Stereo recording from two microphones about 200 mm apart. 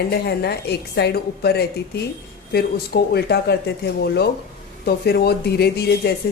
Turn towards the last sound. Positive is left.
turn(degrees=55)  # may be behind; listen again after turning